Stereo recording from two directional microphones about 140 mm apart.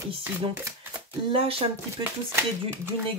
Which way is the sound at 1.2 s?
40° right (ahead or behind).